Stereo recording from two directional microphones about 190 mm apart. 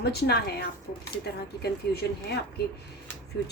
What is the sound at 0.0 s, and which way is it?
Speech, 60° left (ahead or behind).